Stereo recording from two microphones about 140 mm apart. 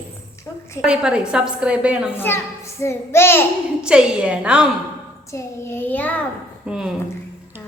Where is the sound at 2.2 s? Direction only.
20° left (ahead or behind).